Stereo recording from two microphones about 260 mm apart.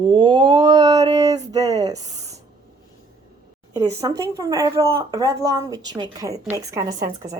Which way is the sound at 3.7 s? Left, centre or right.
Centre.